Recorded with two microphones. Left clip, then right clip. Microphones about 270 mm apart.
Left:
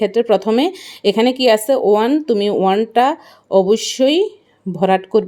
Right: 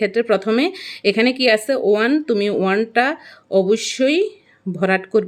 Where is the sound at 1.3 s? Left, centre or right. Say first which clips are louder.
Left 4 dB; left.